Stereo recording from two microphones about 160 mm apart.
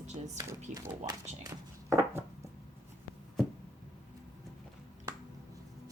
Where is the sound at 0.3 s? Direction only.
25° right (ahead or behind).